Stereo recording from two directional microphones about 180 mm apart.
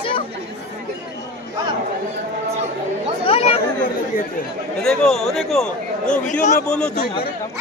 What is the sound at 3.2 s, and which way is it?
Speech, 35° left (ahead or behind).